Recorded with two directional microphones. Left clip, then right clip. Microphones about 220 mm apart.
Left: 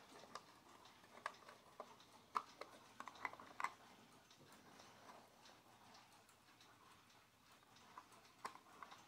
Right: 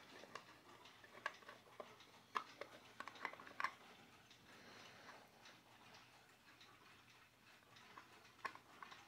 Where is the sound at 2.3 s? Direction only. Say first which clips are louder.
Left 1 dB; 5° right (ahead or behind).